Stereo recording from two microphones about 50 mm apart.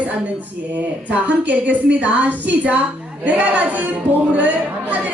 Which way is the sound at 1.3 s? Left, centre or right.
Right.